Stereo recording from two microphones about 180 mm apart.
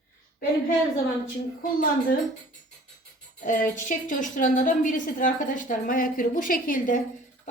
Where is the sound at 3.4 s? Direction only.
45° left (ahead or behind).